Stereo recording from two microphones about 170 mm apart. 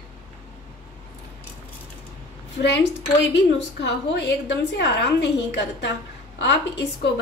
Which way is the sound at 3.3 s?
90° left.